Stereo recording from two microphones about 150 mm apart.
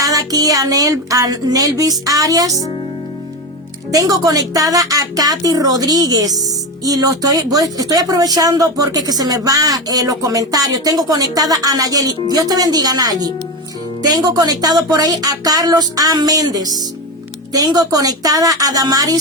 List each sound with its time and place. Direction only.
0.0 s speech: 20° right (ahead or behind)
3.9 s speech: 25° right (ahead or behind)